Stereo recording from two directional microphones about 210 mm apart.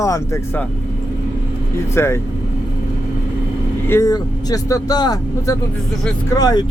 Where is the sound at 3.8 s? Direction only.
15° left (ahead or behind).